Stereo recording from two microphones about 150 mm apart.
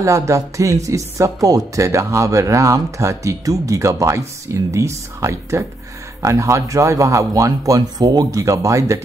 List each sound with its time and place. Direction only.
0.0 s speech: 20° right (ahead or behind)